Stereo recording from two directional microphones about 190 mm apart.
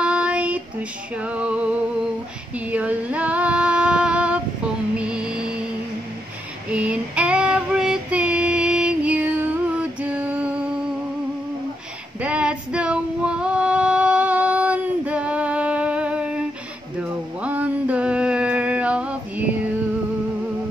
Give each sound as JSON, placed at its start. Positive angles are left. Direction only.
{"t": 0.0, "sound": "child singing", "side_deg": -5}
{"t": 1.1, "sound": "female singing", "side_deg": -5}
{"t": 4.9, "sound": "music", "side_deg": -5}
{"t": 6.7, "sound": "female singing", "side_deg": -5}
{"t": 12.2, "sound": "female singing", "side_deg": -5}
{"t": 17.4, "sound": "a sound", "side_deg": -10}